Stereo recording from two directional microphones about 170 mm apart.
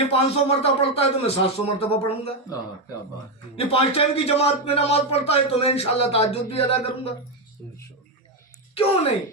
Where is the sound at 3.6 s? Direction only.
35° left (ahead or behind).